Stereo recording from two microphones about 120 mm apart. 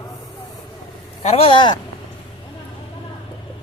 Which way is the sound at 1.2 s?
55° left (ahead or behind).